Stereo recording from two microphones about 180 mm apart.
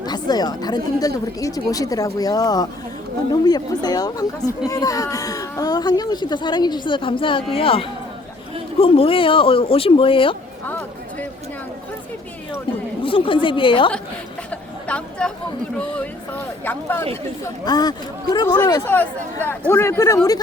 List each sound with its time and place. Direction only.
0.0 s speech: 20° left (ahead or behind)
10.7 s a sound: 5° left (ahead or behind)
13.1 s speech: 30° left (ahead or behind)
14.5 s chatter: 5° left (ahead or behind)
16.0 s speech: 10° left (ahead or behind)
17.7 s speech: 20° left (ahead or behind)